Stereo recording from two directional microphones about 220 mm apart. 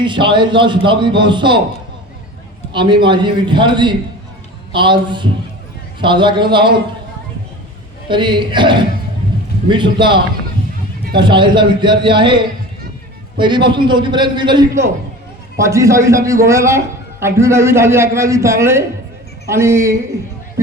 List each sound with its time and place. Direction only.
0.0 s a man's voice: 20° right (ahead or behind)
2.7 s a man's voice: 20° right (ahead or behind)
8.0 s a man's voice: 20° right (ahead or behind)